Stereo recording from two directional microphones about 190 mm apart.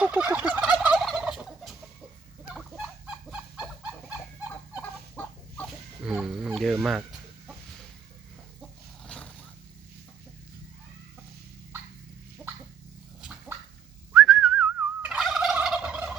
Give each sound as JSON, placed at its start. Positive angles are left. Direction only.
{"t": 0.0, "sound": "fowl", "side_deg": -10}
{"t": 5.1, "sound": "chicken", "side_deg": 10}
{"t": 6.0, "sound": "fowl", "side_deg": -5}
{"t": 9.0, "sound": "vehicle", "side_deg": 5}
{"t": 14.1, "sound": "gobble", "side_deg": 0}